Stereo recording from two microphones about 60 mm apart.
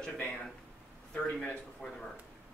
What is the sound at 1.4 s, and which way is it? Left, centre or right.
Speech, centre.